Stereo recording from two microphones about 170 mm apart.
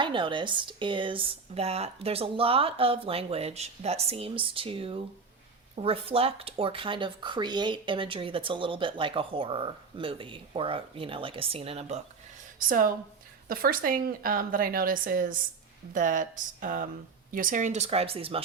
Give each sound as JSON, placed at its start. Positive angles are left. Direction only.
{"t": 0.0, "sound": "speech", "side_deg": -30}
{"t": 12.5, "sound": "a woman's voice", "side_deg": -55}